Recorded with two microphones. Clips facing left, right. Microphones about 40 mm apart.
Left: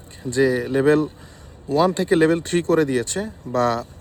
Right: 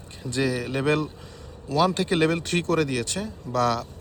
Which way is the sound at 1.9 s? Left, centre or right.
Right.